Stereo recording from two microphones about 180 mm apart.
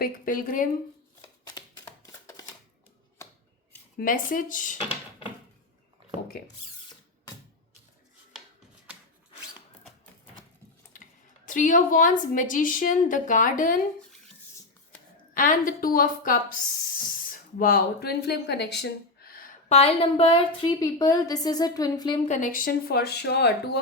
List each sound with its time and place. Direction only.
0.0 s a woman's voice: 50° left (ahead or behind)
1.5 s a sound: 25° left (ahead or behind)
3.9 s a woman's voice: 50° left (ahead or behind)
10.9 s speech: 45° left (ahead or behind)
15.4 s a woman's voice: 50° left (ahead or behind)
17.6 s speech: 55° left (ahead or behind); by 22.2 s 25° left (ahead or behind)
22.3 s speech: 50° left (ahead or behind); by 23.8 s 65° left (ahead or behind)